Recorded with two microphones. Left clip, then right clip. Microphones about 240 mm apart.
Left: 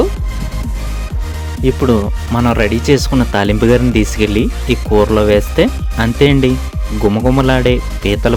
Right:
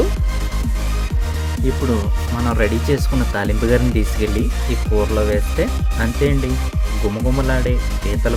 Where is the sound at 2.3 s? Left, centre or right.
Left.